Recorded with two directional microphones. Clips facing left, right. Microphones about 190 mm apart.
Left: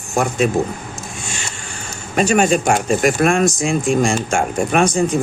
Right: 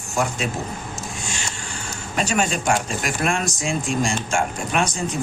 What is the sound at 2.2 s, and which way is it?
Speech, 55° left (ahead or behind).